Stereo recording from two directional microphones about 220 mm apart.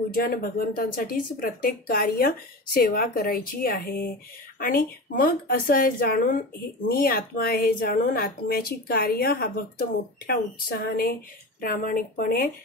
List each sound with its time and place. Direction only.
0.1 s speech: 40° left (ahead or behind)